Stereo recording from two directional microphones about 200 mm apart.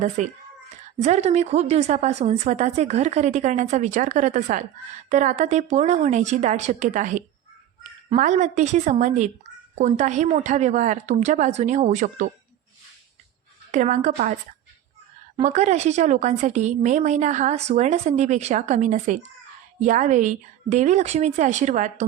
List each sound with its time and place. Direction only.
0.2 s a woman's voice: 35° right (ahead or behind)
13.7 s a woman's voice: 40° right (ahead or behind)
15.4 s a woman's voice: 35° right (ahead or behind)